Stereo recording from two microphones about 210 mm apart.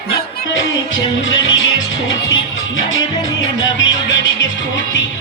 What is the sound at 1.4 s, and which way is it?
Music, 65° left (ahead or behind).